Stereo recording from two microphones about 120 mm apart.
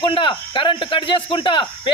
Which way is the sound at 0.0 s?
45° left (ahead or behind).